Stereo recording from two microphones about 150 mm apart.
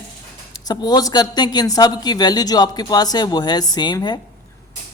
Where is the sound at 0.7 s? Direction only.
30° left (ahead or behind).